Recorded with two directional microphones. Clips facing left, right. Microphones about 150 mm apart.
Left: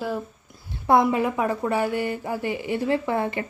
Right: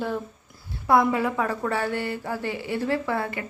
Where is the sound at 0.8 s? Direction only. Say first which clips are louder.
Left 1 dB; 20° left (ahead or behind).